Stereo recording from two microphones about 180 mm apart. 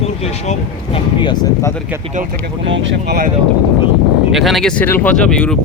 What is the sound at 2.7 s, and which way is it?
Speech, 90° right.